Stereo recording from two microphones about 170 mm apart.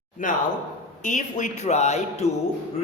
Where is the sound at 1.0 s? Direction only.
50° left (ahead or behind).